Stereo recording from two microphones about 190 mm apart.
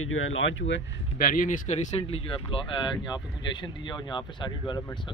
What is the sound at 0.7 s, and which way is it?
Speech, 50° left (ahead or behind).